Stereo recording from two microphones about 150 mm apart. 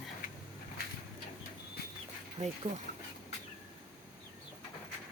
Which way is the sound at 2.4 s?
45° right (ahead or behind).